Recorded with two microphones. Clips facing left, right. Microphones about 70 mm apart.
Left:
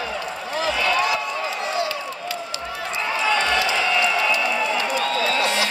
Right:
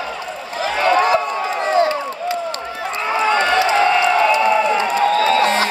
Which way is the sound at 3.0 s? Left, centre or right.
Right.